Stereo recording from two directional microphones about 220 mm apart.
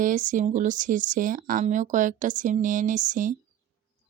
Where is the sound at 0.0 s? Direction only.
35° right (ahead or behind).